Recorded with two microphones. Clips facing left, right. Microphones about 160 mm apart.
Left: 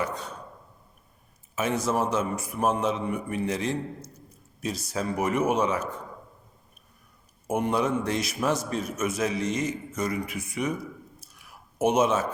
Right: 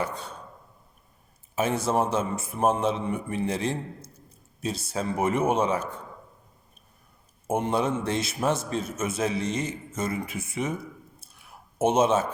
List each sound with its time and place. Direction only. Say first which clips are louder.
0.0 s speech: even; 30° right (ahead or behind)
1.5 s a man's voice: right 1 dB; 30° right (ahead or behind)
7.4 s a man's voice: even; 25° right (ahead or behind)
11.2 s clicking: right 1 dB; 25° right (ahead or behind)